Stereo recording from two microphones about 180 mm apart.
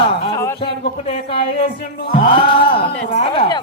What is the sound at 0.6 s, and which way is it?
Speech, 35° left (ahead or behind).